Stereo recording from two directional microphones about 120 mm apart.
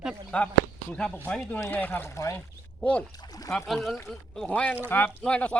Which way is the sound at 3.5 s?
Centre (ahead or behind).